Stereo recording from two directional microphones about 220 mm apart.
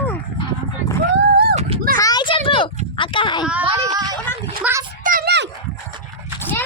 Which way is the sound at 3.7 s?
15° right (ahead or behind).